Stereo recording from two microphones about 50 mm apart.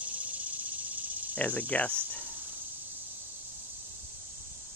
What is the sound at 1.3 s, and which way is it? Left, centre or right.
Speech, left.